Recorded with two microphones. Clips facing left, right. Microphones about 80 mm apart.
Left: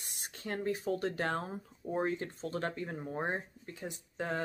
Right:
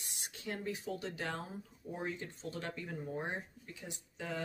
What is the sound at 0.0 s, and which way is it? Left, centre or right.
Speech, left.